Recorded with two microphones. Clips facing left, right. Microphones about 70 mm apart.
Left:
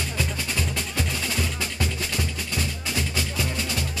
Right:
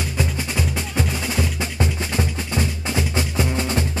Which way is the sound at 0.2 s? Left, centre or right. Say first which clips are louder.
Right 5 dB; centre.